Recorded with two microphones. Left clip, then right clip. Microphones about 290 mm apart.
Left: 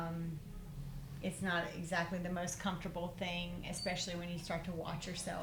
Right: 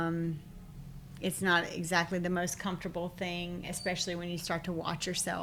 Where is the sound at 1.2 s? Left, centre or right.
Right.